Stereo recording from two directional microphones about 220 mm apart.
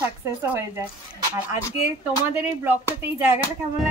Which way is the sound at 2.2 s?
10° right (ahead or behind).